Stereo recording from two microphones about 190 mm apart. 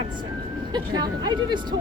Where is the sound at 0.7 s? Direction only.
20° right (ahead or behind).